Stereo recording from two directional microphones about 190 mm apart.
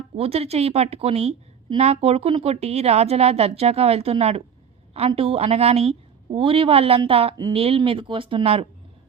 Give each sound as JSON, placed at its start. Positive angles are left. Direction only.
{"t": 0.2, "sound": "a woman's voice", "side_deg": -30}